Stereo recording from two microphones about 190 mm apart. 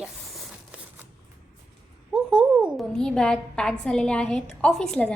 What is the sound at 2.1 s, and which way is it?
A woman's voice, 5° right (ahead or behind).